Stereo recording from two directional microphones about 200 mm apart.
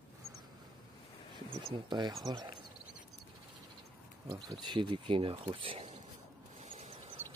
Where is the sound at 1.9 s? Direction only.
20° right (ahead or behind).